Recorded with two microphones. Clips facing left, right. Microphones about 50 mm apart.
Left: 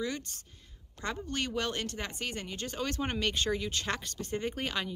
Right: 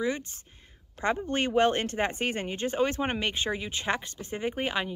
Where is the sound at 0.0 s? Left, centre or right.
Right.